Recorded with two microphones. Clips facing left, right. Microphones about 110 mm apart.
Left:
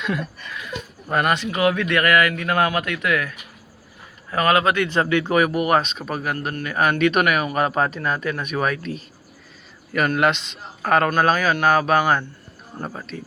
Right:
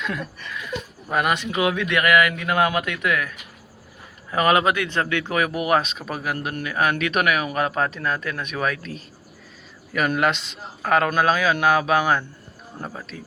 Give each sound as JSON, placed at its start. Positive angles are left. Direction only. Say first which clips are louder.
{"t": 0.0, "sound": "a sound", "louder": "left 3 dB", "side_deg": 5}
{"t": 1.0, "sound": "speech", "louder": "left 2 dB", "side_deg": -5}
{"t": 4.9, "sound": "speech", "louder": "left 4 dB", "side_deg": 10}
{"t": 10.2, "sound": "speech", "louder": "left 2 dB", "side_deg": 0}